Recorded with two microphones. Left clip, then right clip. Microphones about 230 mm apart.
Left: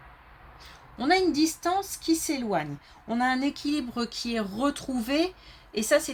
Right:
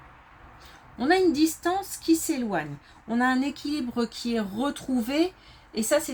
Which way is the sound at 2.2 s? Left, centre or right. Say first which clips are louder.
Even; left.